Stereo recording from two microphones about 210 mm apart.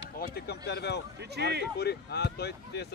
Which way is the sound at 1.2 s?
50° right (ahead or behind).